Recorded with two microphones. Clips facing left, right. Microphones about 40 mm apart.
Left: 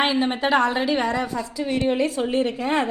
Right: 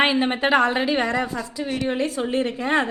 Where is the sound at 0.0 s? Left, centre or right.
Centre.